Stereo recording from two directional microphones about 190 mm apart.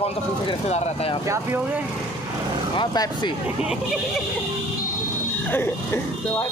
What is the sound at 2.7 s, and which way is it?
Speech, 20° left (ahead or behind).